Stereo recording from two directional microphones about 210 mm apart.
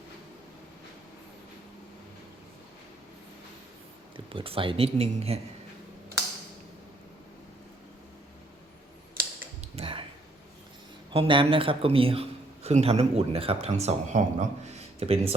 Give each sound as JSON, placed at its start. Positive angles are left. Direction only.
{"t": 4.3, "sound": "speech", "side_deg": -25}
{"t": 9.7, "sound": "finger snapping", "side_deg": -25}
{"t": 11.1, "sound": "speech", "side_deg": -25}